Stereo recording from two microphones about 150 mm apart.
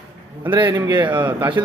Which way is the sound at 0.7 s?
25° right (ahead or behind).